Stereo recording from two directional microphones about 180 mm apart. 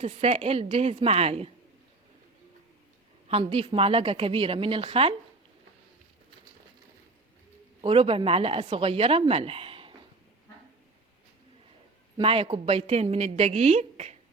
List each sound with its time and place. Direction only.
0.0 s a woman's voice: 35° right (ahead or behind)
3.2 s a woman's voice: 30° right (ahead or behind)
7.8 s a woman's voice: 30° right (ahead or behind)
12.1 s a woman's voice: 30° right (ahead or behind)